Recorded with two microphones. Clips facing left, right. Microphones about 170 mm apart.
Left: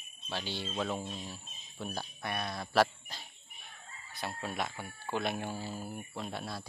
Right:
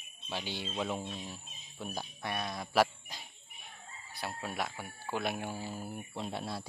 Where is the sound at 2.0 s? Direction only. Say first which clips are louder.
Right 1 dB; 15° right (ahead or behind).